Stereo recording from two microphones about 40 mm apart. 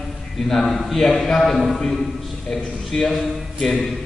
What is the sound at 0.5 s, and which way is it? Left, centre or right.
A man's voice, centre.